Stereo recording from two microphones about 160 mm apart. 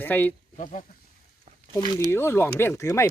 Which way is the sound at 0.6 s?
50° left (ahead or behind).